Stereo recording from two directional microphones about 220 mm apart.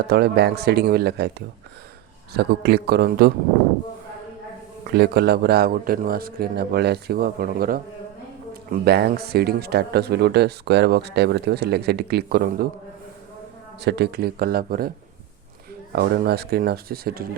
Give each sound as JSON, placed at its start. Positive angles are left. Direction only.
{"t": 0.1, "sound": "speech", "side_deg": -45}
{"t": 2.3, "sound": "speech", "side_deg": -50}
{"t": 4.9, "sound": "speech", "side_deg": -45}
{"t": 13.8, "sound": "speech", "side_deg": -50}